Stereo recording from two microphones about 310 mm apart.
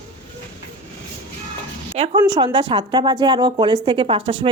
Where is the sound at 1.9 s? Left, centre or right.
Centre.